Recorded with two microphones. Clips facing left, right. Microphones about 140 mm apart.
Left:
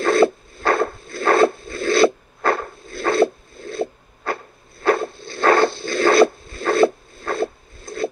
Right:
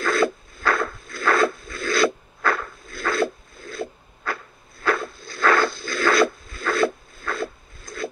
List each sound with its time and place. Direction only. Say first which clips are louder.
0.0 s rub: left 6 dB; 30° left (ahead or behind)